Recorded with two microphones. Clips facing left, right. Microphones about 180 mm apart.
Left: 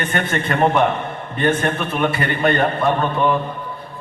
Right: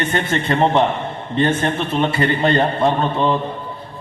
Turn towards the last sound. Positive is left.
turn(degrees=-25)  # may be behind; listen again after turning